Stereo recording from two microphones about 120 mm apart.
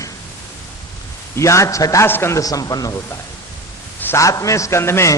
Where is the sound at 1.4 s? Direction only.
25° left (ahead or behind).